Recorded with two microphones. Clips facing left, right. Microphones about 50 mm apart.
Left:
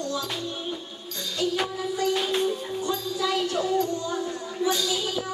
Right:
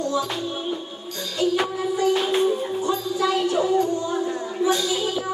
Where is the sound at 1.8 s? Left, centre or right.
Centre.